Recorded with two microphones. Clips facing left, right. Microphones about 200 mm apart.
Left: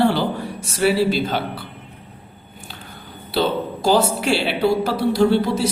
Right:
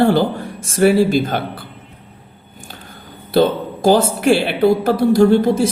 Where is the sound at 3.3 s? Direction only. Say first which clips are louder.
Right 6 dB; 50° right (ahead or behind).